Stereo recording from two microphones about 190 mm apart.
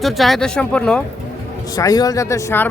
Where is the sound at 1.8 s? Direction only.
20° left (ahead or behind).